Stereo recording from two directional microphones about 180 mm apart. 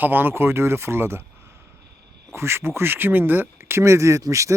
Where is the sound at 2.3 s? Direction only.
15° right (ahead or behind).